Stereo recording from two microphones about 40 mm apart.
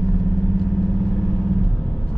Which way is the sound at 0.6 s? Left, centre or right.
Centre.